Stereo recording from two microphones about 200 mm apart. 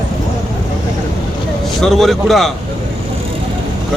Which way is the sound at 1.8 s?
Centre (ahead or behind).